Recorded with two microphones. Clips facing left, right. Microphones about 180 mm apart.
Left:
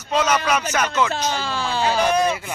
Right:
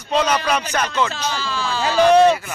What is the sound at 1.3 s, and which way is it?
Speech, 55° left (ahead or behind).